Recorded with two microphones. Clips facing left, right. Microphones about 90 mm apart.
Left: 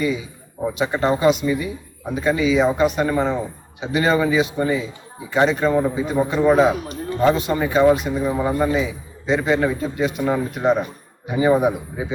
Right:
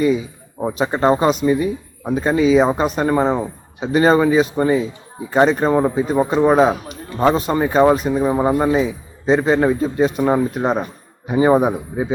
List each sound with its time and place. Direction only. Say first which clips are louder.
0.6 s speech: right 3 dB; 40° right (ahead or behind)